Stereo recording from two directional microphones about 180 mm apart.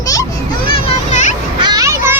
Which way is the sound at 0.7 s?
35° left (ahead or behind).